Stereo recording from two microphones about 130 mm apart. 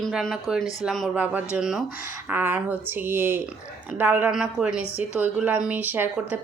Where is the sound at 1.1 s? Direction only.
10° right (ahead or behind).